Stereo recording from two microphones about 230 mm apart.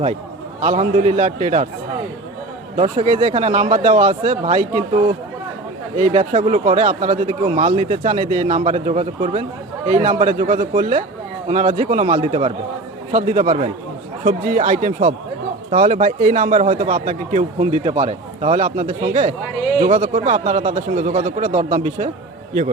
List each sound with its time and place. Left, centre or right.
0.6 s a man's voice: right
2.7 s a man's voice: right